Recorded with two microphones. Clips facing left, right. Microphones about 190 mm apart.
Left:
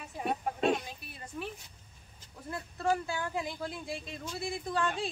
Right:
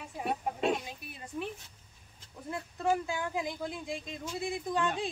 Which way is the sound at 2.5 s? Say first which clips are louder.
Right 1 dB; 15° right (ahead or behind).